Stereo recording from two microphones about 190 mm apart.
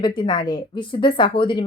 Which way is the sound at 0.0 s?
25° left (ahead or behind).